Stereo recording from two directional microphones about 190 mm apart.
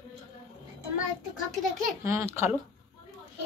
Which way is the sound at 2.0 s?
15° right (ahead or behind).